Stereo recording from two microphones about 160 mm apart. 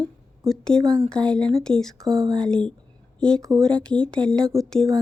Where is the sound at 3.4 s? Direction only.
20° right (ahead or behind).